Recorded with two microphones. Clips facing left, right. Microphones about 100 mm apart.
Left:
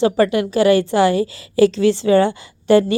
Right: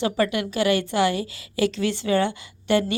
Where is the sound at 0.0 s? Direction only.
35° left (ahead or behind).